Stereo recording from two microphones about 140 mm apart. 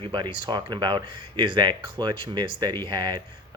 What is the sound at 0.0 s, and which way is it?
Speech, 35° right (ahead or behind).